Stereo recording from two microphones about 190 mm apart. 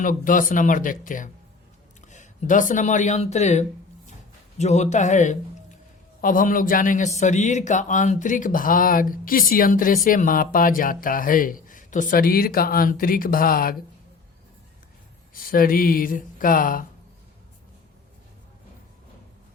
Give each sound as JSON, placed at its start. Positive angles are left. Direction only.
{"t": 0.0, "sound": "speech", "side_deg": 45}
{"t": 15.3, "sound": "speech", "side_deg": 50}